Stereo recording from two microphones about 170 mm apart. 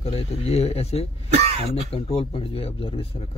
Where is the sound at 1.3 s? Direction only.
40° right (ahead or behind).